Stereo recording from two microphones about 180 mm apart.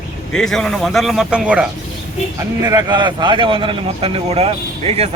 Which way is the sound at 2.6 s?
25° right (ahead or behind).